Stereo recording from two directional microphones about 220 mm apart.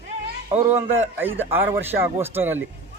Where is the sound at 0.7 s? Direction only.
10° right (ahead or behind).